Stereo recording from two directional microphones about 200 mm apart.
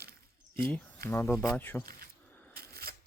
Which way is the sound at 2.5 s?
50° right (ahead or behind).